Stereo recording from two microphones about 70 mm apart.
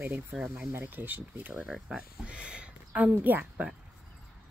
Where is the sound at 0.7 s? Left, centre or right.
Right.